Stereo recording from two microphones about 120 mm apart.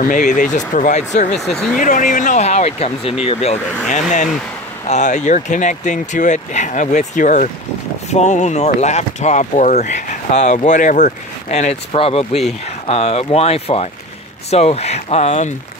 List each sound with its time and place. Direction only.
0.2 s speech: 90° left; by 1.5 s 75° left (ahead or behind)
1.8 s speech: 90° left; by 4.0 s 60° left (ahead or behind)
4.8 s speech: 85° left
8.1 s speech: 75° left (ahead or behind)